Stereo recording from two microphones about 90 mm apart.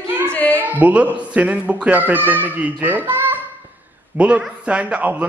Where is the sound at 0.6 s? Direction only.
20° right (ahead or behind).